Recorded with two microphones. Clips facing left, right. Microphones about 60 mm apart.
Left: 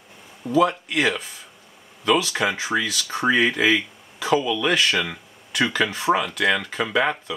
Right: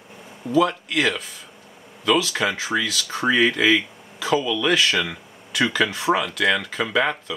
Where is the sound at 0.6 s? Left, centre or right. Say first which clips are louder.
Even; centre.